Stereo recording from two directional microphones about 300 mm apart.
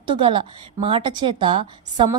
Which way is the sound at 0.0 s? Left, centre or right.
Centre.